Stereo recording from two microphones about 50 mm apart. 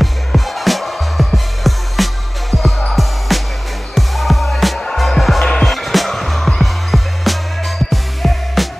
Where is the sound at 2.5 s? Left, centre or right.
Left.